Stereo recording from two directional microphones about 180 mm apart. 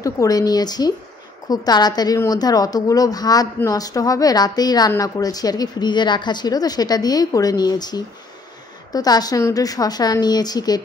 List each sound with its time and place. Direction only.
0.0 s a woman's voice: 20° left (ahead or behind)